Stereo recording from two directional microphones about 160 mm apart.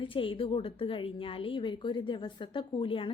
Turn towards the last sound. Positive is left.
turn(degrees=30)  # may be behind; listen again after turning